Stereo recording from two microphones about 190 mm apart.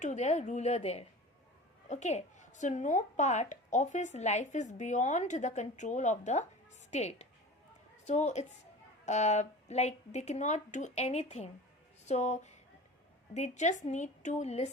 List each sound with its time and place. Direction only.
0.0 s speech: 40° left (ahead or behind)